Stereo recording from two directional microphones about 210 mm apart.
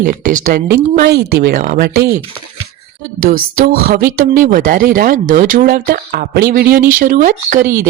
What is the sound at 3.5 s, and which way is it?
Speech, 40° right (ahead or behind).